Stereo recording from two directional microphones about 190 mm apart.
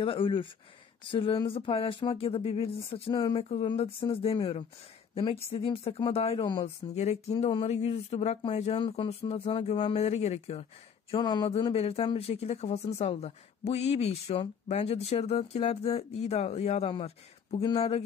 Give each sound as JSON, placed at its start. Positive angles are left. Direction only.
{"t": 0.0, "sound": "a woman's voice", "side_deg": 25}